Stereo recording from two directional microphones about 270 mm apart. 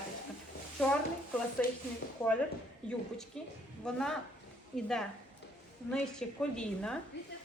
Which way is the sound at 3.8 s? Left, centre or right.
Centre.